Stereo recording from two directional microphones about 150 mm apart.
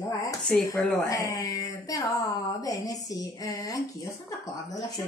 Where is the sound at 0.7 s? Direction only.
20° left (ahead or behind).